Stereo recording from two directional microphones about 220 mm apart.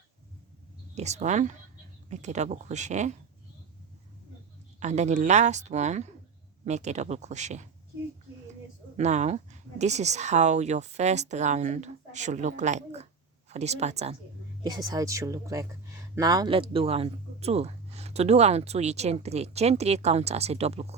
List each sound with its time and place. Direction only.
0.9 s speech: 30° right (ahead or behind)
4.8 s speech: 30° right (ahead or behind)
9.0 s speech: 30° right (ahead or behind)
14.6 s speech: 20° right (ahead or behind)